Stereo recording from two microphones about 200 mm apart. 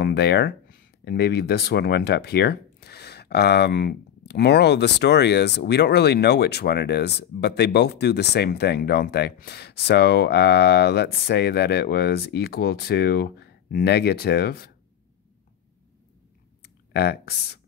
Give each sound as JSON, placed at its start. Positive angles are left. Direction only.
{"t": 0.0, "sound": "speech", "side_deg": 55}
{"t": 16.6, "sound": "clicking", "side_deg": 55}